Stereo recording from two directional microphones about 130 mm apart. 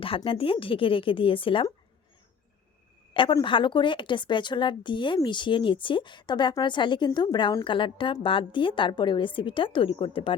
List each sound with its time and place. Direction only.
0.3 s speech: 45° left (ahead or behind)
3.1 s a woman's voice: 40° left (ahead or behind)